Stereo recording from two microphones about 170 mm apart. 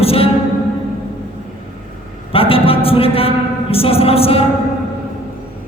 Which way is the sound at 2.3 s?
35° left (ahead or behind).